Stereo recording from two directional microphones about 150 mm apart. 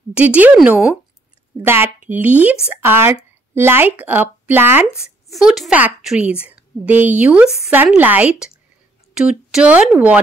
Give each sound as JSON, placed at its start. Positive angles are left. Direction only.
{"t": 0.1, "sound": "speech", "side_deg": -10}
{"t": 4.9, "sound": "a woman's voice", "side_deg": 0}